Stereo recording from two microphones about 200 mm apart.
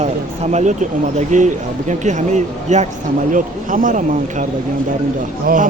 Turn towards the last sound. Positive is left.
turn(degrees=-45)  # may be behind; listen again after turning